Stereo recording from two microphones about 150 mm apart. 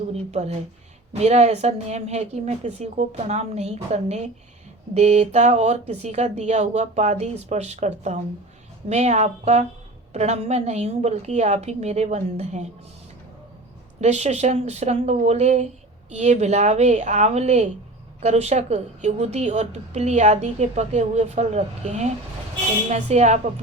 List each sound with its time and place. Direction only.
0.1 s a woman's voice: 45° right (ahead or behind)
14.0 s a woman's voice: 50° right (ahead or behind)